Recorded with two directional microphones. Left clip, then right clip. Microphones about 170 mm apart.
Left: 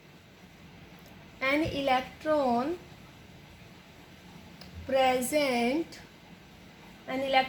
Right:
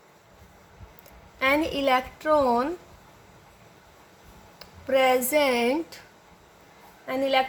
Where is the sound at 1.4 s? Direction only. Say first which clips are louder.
Right 5 dB; 90° right.